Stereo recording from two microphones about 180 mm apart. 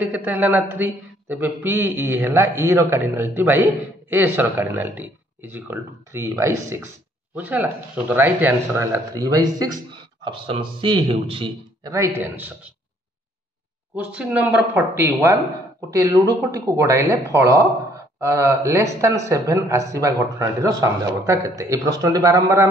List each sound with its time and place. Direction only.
0.0 s a man's voice: 10° right (ahead or behind); by 11.5 s 30° right (ahead or behind)
11.8 s a man's voice: 15° right (ahead or behind)
13.9 s a man's voice: 5° right (ahead or behind)